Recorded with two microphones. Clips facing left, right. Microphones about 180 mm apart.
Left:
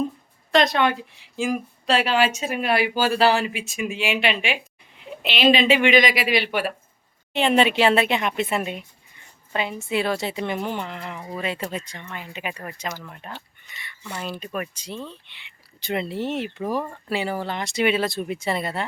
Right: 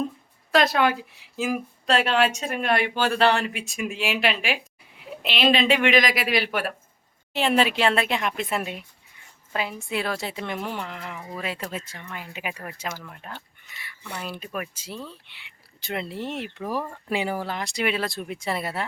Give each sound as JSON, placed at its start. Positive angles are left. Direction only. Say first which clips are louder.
{"t": 0.5, "sound": "speech", "louder": "left 1 dB", "side_deg": -5}
{"t": 17.1, "sound": "speech", "louder": "even", "side_deg": -15}